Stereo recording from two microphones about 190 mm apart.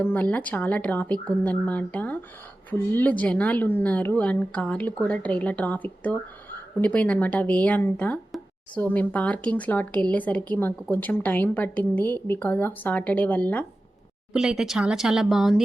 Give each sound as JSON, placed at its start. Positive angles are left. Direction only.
{"t": 0.0, "sound": "a woman's voice", "side_deg": 10}
{"t": 14.3, "sound": "speech", "side_deg": -5}